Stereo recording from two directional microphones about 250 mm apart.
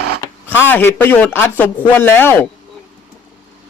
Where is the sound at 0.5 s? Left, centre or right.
Centre.